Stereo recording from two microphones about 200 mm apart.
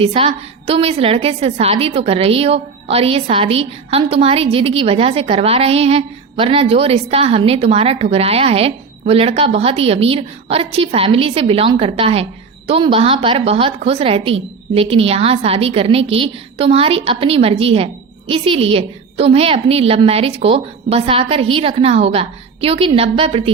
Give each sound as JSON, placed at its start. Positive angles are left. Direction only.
{"t": 0.0, "sound": "a woman's voice", "side_deg": -30}